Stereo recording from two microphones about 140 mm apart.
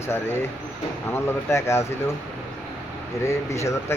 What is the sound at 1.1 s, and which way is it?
Speech, 20° left (ahead or behind).